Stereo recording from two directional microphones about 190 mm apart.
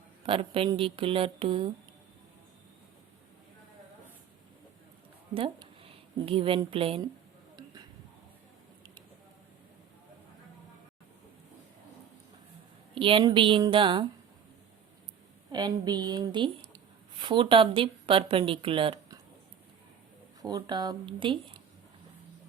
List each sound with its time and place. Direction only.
0.3 s speech: 30° right (ahead or behind)
5.3 s speech: 30° right (ahead or behind)
7.5 s a sound: 20° right (ahead or behind)
12.9 s speech: 25° right (ahead or behind)
15.5 s speech: 20° right (ahead or behind)
20.4 s speech: 20° right (ahead or behind)